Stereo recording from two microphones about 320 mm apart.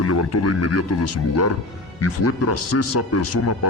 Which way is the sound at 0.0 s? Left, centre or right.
Left.